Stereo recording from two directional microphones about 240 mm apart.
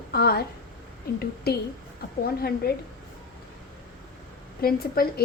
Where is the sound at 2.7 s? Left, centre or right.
Left.